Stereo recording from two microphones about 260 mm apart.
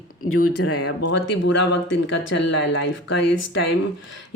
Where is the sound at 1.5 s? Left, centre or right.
Left.